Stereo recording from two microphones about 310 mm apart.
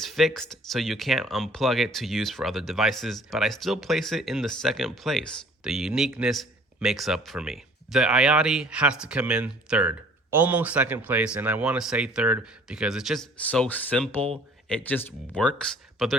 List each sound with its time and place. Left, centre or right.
0.0 s speech: centre